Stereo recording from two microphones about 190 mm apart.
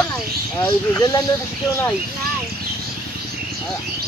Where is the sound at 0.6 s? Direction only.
15° left (ahead or behind).